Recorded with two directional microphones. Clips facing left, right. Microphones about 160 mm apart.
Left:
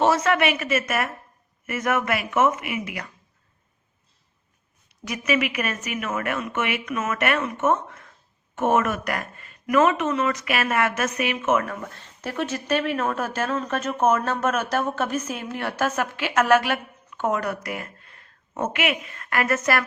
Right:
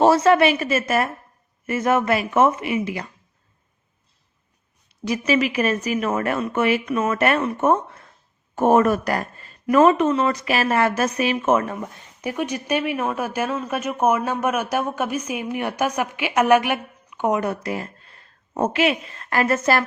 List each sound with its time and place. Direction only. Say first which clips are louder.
0.0 s speech: right 5 dB; 30° right (ahead or behind)
5.0 s speech: right 4 dB; 30° right (ahead or behind)